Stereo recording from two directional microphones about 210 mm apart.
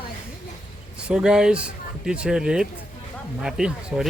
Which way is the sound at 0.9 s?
5° right (ahead or behind).